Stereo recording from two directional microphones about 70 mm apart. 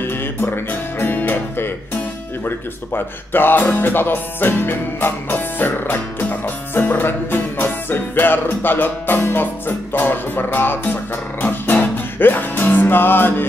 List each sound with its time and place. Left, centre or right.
0.0 s music: left
2.4 s speech: left
11.4 s music: left